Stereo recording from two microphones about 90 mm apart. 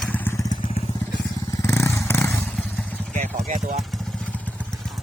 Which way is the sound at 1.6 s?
30° left (ahead or behind).